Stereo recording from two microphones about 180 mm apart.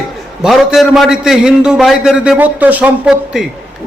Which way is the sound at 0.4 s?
Centre (ahead or behind).